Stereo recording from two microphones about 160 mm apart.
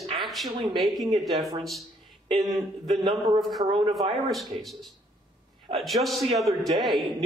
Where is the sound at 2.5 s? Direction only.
Centre (ahead or behind).